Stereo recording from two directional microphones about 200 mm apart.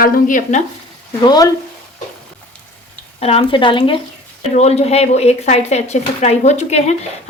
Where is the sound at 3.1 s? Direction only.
30° left (ahead or behind).